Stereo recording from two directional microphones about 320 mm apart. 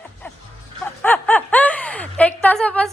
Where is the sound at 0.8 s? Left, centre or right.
Centre.